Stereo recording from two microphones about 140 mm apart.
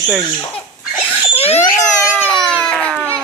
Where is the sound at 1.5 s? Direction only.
20° left (ahead or behind).